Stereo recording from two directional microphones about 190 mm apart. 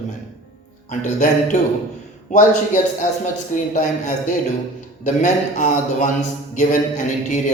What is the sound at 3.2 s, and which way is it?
A man's voice, 40° left (ahead or behind).